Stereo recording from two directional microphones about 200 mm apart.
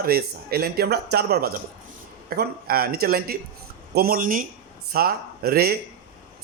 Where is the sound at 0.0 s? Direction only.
50° right (ahead or behind).